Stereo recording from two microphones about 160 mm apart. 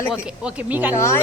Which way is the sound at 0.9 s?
15° left (ahead or behind).